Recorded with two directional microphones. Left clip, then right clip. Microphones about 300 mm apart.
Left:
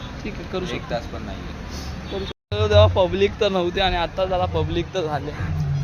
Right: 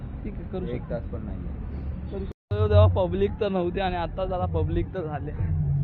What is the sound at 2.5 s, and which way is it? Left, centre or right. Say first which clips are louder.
Speech: left 6 dB; centre.